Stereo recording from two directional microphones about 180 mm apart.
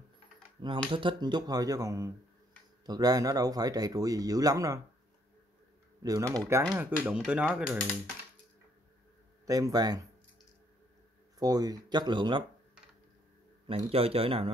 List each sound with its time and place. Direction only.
0.6 s speech: 25° right (ahead or behind)
6.0 s speech: 20° right (ahead or behind)
9.5 s speech: 20° right (ahead or behind)
11.3 s speech: 20° right (ahead or behind)
13.7 s speech: 30° right (ahead or behind)